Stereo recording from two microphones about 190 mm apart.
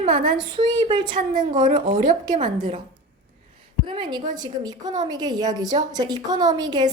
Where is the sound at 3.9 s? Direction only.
25° right (ahead or behind).